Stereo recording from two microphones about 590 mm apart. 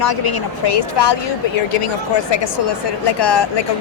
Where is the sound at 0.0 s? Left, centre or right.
Left.